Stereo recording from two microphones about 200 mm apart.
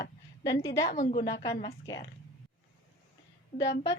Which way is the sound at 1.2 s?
15° left (ahead or behind).